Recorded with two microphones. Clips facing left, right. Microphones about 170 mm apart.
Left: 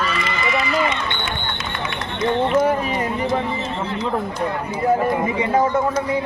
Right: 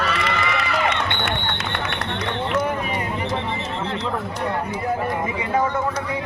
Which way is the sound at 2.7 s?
35° left (ahead or behind).